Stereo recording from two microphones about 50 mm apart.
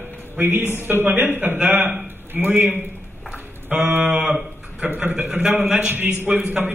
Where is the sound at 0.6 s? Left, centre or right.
Left.